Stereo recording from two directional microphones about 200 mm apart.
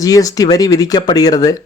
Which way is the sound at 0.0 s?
15° left (ahead or behind).